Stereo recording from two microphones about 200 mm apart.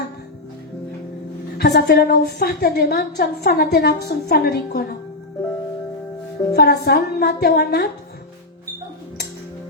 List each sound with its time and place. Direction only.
1.5 s a woman's voice: 55° left (ahead or behind)
6.5 s a woman's voice: 55° left (ahead or behind)